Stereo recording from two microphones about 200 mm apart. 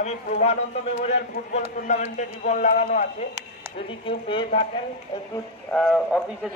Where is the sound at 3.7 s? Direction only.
25° left (ahead or behind).